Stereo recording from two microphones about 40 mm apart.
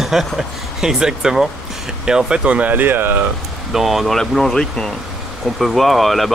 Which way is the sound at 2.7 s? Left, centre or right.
Right.